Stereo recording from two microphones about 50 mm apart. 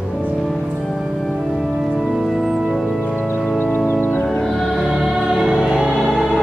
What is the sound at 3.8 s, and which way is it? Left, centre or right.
Organ, left.